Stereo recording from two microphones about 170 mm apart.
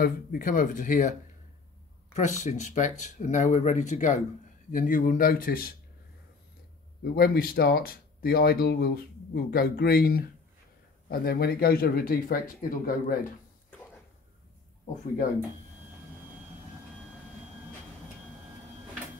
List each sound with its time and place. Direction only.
0.0 s speech: 55° left (ahead or behind)
2.1 s speech: 45° left (ahead or behind); by 5.7 s 60° left (ahead or behind)
7.2 s speech: 65° left (ahead or behind)